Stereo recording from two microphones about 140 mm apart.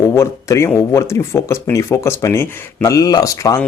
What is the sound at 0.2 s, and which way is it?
Speech, 20° left (ahead or behind).